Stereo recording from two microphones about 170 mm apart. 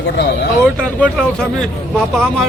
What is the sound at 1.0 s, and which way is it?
Speech, 5° left (ahead or behind).